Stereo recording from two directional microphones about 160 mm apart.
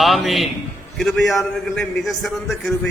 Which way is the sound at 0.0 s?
Centre (ahead or behind).